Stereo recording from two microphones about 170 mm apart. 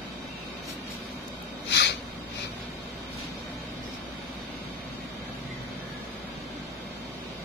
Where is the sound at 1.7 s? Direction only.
90° left.